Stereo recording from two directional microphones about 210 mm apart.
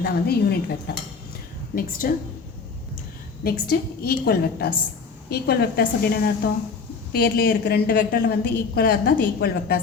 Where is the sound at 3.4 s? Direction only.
50° left (ahead or behind).